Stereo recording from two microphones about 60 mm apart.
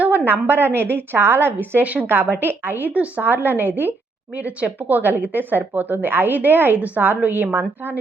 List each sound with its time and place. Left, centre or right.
0.0 s speech: right
1.8 s a woman's voice: right